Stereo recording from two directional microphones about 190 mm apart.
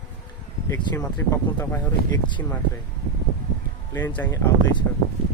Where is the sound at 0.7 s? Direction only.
15° left (ahead or behind).